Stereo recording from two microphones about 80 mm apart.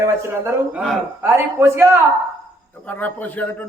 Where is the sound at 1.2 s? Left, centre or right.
Right.